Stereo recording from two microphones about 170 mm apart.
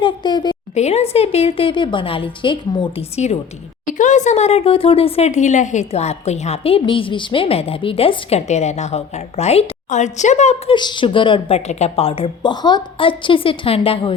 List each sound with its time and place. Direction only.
0.0 s a sound: 25° left (ahead or behind)
0.7 s speech: 40° left (ahead or behind)
3.2 s speech: 40° left (ahead or behind)
10.8 s speech: 25° left (ahead or behind)